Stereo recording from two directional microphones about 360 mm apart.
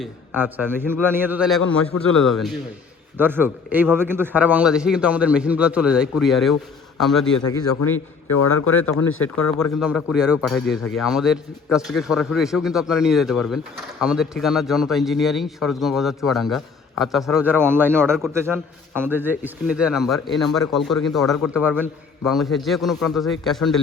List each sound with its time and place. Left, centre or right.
0.0 s a man's voice: centre
8.3 s speech: left
9.8 s a man's voice: centre